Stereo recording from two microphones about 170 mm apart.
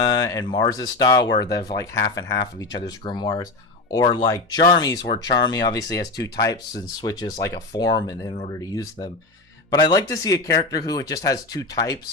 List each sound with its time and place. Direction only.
0.1 s speech: 25° left (ahead or behind)
8.3 s speech: 35° left (ahead or behind)
8.7 s speech: 20° left (ahead or behind)